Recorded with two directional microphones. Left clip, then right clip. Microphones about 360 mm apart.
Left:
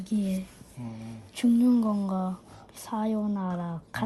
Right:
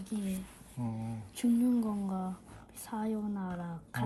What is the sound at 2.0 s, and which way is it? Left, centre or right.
Speech, left.